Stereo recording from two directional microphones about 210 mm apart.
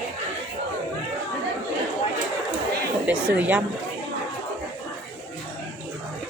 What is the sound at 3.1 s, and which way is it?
Speech, 5° right (ahead or behind).